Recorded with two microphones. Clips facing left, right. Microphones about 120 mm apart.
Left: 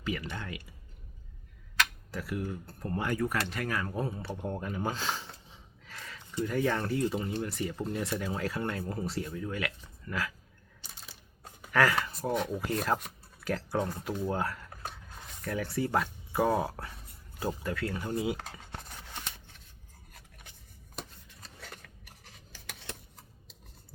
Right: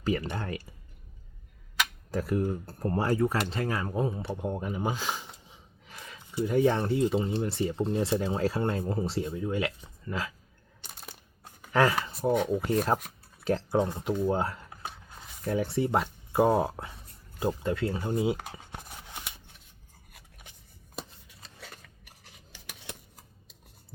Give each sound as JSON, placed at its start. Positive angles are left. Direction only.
{"t": 0.0, "sound": "speech", "side_deg": -40}
{"t": 2.0, "sound": "speech", "side_deg": -40}
{"t": 10.8, "sound": "a sound", "side_deg": -60}
{"t": 11.7, "sound": "speech", "side_deg": -25}
{"t": 18.3, "sound": "a sound", "side_deg": -15}
{"t": 22.3, "sound": "scissors", "side_deg": -10}